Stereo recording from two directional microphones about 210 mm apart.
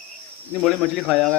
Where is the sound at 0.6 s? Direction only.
Centre (ahead or behind).